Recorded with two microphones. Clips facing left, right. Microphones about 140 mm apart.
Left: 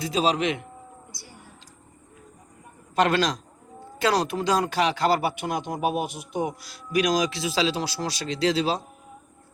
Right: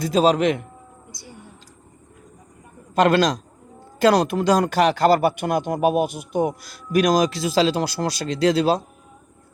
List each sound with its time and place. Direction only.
0.0 s speech: 45° right (ahead or behind)
2.9 s a man's voice: 40° right (ahead or behind)